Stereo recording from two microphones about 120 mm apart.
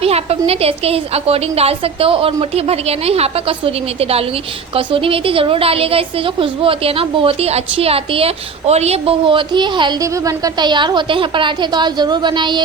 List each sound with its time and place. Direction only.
0.0 s a woman's voice: 55° right (ahead or behind)
4.7 s a woman's voice: 50° right (ahead or behind)
10.0 s a woman's voice: 30° right (ahead or behind)